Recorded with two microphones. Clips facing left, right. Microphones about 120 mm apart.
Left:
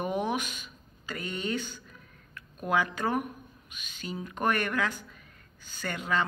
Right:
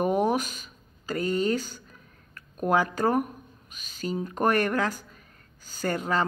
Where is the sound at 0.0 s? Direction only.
40° right (ahead or behind).